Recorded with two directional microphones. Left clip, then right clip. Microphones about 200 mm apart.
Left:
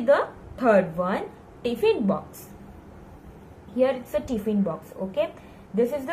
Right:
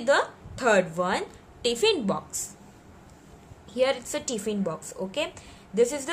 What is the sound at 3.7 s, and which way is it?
A woman's voice, 60° right (ahead or behind).